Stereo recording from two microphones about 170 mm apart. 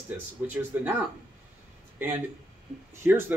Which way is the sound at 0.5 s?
10° right (ahead or behind).